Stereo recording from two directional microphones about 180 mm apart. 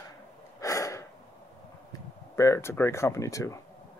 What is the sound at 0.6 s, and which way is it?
Gasp, 20° left (ahead or behind).